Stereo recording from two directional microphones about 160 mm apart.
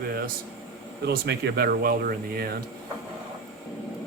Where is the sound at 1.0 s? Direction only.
90° right; by 2.6 s 75° right (ahead or behind).